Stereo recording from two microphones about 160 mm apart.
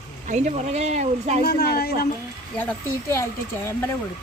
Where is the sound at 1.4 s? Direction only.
80° left.